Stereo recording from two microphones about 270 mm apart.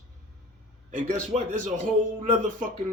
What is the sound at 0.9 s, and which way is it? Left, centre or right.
Speech, right.